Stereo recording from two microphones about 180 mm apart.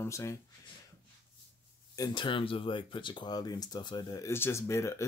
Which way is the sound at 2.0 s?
25° left (ahead or behind).